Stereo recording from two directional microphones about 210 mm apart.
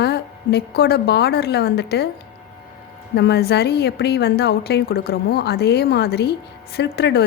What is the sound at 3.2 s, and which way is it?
A woman's voice, 50° left (ahead or behind).